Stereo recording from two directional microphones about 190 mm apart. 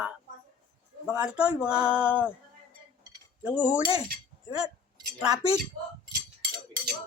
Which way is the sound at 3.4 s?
5° right (ahead or behind).